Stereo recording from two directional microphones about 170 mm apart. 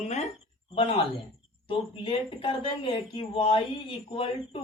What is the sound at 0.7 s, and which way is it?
A woman's voice, 30° left (ahead or behind).